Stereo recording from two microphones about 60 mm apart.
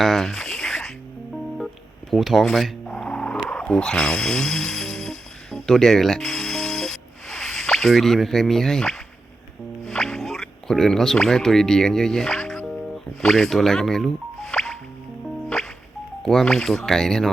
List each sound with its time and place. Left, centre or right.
0.0 s a sound: centre
1.5 s music: centre
2.8 s music: centre
16.2 s speech: centre